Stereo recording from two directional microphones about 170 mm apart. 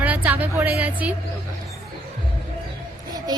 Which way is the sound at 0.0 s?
10° right (ahead or behind).